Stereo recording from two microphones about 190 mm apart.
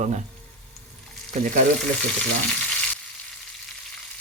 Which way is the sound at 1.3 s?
40° right (ahead or behind).